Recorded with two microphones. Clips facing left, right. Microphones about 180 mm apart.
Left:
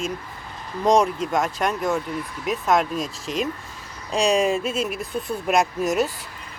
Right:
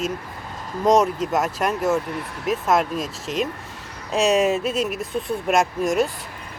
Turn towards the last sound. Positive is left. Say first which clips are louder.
# right 1 dB
turn(degrees=0)  # may be behind; listen again after turning